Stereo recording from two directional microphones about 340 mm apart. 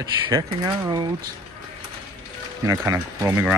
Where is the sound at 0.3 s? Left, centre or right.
Centre.